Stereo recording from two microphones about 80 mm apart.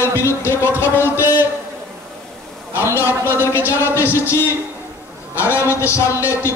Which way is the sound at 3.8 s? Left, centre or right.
Left.